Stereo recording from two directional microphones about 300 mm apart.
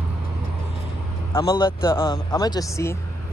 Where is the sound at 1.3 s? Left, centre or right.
Centre.